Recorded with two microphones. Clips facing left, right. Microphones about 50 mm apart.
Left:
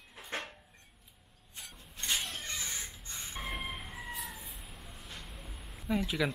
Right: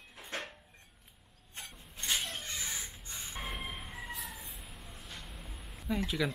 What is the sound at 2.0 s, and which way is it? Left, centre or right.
Mouse, centre.